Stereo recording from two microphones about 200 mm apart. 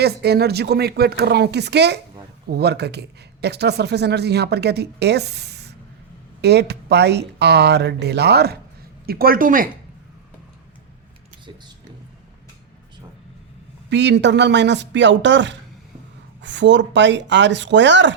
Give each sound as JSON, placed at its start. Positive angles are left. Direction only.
{"t": 0.0, "sound": "speech", "side_deg": -55}
{"t": 13.9, "sound": "speech", "side_deg": -60}